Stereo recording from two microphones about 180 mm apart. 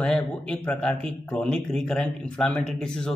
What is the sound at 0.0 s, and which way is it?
Speech, 5° left (ahead or behind).